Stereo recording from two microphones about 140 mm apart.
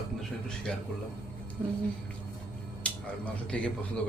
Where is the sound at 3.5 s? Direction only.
10° left (ahead or behind).